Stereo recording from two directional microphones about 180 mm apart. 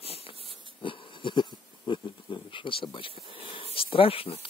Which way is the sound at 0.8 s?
30° left (ahead or behind).